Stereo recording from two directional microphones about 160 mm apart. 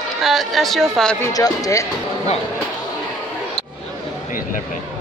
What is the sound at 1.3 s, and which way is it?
Speech, 20° left (ahead or behind).